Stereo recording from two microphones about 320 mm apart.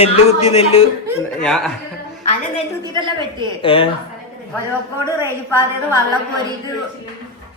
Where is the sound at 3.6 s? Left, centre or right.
Centre.